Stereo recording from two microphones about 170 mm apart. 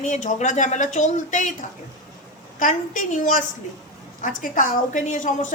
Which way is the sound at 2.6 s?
50° left (ahead or behind).